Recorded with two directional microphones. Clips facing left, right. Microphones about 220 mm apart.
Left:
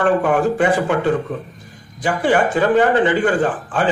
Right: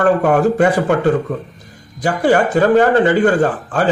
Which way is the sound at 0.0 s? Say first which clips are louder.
Right 3 dB; 40° right (ahead or behind).